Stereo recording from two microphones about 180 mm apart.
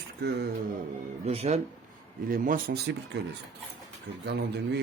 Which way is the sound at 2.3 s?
50° right (ahead or behind).